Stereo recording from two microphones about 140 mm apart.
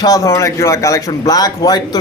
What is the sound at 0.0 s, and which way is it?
A man's voice, 25° left (ahead or behind).